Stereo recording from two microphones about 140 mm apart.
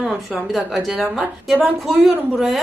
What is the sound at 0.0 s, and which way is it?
A woman's voice, centre (ahead or behind).